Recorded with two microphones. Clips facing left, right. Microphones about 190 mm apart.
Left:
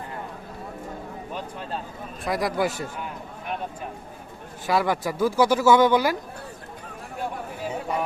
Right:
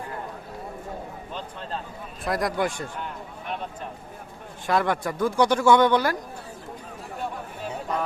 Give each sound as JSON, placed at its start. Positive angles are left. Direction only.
{"t": 2.2, "sound": "speech", "side_deg": 0}
{"t": 4.6, "sound": "speech", "side_deg": 5}